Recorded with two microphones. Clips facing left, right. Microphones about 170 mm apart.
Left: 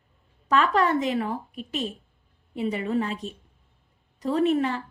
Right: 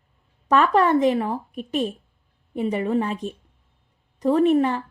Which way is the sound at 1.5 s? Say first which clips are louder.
Right 6 dB; 50° right (ahead or behind).